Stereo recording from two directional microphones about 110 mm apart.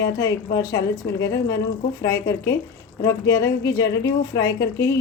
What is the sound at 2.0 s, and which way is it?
A woman's voice, 30° left (ahead or behind).